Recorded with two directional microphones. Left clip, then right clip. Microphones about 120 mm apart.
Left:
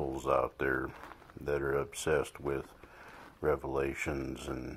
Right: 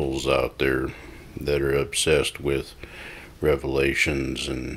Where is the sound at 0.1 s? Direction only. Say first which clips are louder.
Right 6 dB; 25° right (ahead or behind).